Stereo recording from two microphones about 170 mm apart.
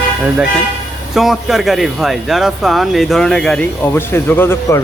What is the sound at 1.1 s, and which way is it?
Speech, centre (ahead or behind).